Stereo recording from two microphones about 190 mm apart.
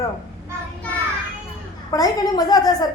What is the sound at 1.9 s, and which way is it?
A woman's voice, 20° left (ahead or behind).